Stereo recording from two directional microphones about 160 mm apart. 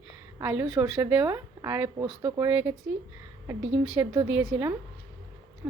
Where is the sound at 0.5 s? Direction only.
10° right (ahead or behind).